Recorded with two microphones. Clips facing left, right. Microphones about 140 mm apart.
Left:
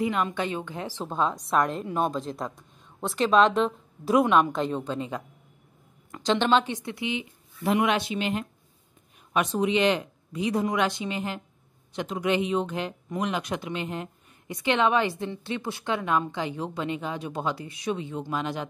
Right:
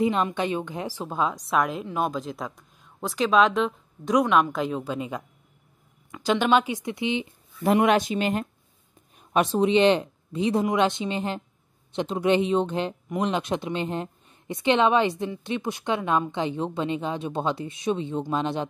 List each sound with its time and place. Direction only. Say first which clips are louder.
0.0 s a woman's voice: right 3 dB; 20° right (ahead or behind)
7.6 s speech: right 4 dB; 45° right (ahead or behind)
9.3 s a woman's voice: right 4 dB; 30° right (ahead or behind)